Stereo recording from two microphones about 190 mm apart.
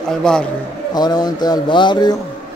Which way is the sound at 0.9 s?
20° left (ahead or behind).